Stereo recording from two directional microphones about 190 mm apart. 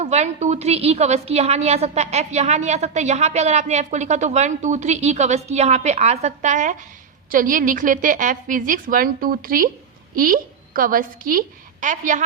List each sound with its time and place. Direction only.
0.0 s a woman's voice: 35° right (ahead or behind)